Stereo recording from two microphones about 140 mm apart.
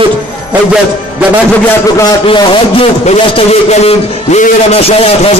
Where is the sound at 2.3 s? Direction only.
40° left (ahead or behind).